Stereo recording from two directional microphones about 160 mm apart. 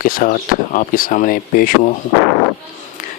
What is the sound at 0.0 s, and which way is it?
Speech, 60° left (ahead or behind).